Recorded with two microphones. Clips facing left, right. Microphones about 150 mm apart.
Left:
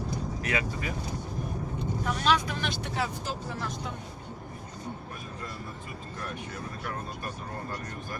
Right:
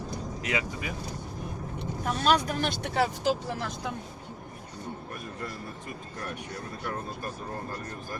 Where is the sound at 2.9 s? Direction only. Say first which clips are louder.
Right 10 dB; 65° right (ahead or behind).